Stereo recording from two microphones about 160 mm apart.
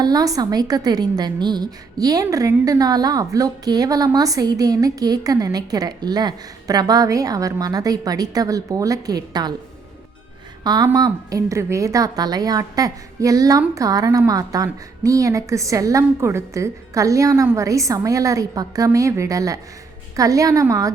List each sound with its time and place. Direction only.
0.0 s a woman's voice: 25° right (ahead or behind)
10.6 s a woman's voice: 25° right (ahead or behind)